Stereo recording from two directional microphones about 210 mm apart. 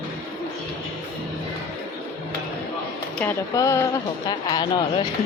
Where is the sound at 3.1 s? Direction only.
10° left (ahead or behind).